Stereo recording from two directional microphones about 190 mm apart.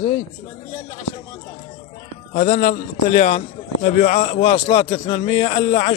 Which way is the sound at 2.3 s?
40° left (ahead or behind).